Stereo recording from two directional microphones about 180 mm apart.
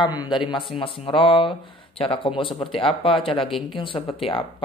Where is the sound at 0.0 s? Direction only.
25° left (ahead or behind).